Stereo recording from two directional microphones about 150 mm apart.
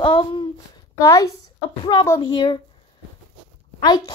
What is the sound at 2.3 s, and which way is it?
Speech, 30° left (ahead or behind).